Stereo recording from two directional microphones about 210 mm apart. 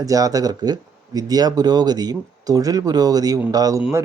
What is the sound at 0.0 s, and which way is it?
Speech, 15° right (ahead or behind).